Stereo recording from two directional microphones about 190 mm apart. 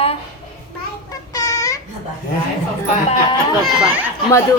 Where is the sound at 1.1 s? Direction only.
20° left (ahead or behind).